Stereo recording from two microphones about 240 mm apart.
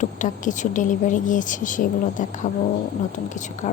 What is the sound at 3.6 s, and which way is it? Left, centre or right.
Speech, left.